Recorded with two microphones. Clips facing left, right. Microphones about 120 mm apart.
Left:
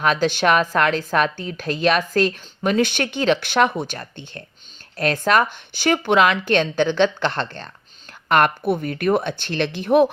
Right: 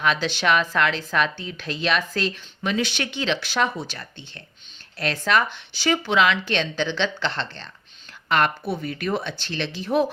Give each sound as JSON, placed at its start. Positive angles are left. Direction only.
{"t": 0.0, "sound": "a woman's voice", "side_deg": 45}